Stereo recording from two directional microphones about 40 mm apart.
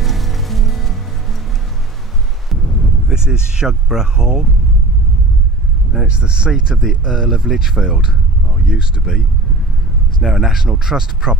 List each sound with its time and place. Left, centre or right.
0.0 s music: centre
2.5 s a sound: centre
3.1 s speech: centre
6.0 s speech: right
10.2 s speech: centre